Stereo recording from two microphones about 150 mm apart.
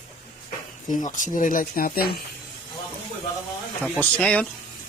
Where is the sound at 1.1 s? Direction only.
60° left (ahead or behind); by 2.1 s 80° left.